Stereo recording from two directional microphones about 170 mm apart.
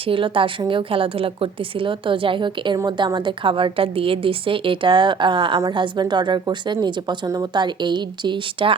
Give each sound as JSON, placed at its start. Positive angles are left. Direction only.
{"t": 0.0, "sound": "a woman's voice", "side_deg": -30}